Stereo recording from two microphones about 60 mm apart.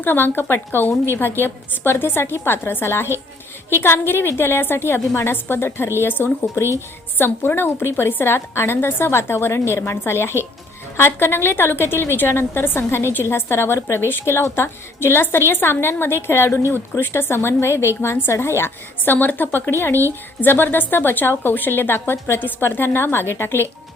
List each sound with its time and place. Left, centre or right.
0.0 s a woman's voice: left